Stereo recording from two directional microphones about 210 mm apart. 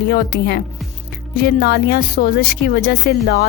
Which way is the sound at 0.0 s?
50° left (ahead or behind).